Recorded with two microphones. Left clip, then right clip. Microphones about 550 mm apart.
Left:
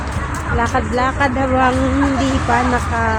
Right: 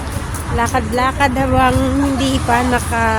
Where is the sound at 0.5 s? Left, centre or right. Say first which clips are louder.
Right 1 dB; right.